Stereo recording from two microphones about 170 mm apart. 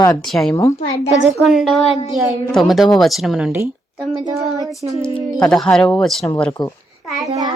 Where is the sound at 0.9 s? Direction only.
40° left (ahead or behind).